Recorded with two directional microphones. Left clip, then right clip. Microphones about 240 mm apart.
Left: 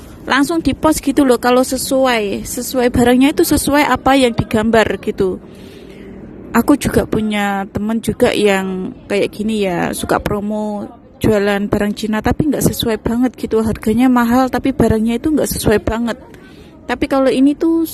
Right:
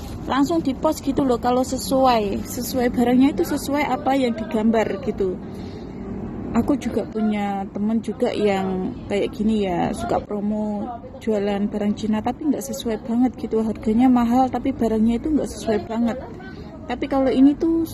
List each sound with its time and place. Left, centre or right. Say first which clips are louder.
0.3 s speech: left 6 dB; left
6.5 s speech: left 9 dB; left